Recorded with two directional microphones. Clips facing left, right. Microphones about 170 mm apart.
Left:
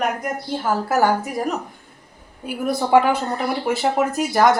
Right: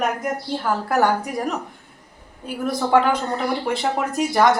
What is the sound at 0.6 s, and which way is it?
A woman's voice, 5° left (ahead or behind).